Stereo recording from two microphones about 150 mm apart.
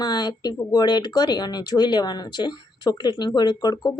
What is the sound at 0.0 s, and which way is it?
Speech, 25° left (ahead or behind).